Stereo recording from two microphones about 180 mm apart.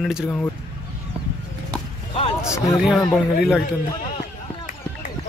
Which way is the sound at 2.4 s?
Centre (ahead or behind).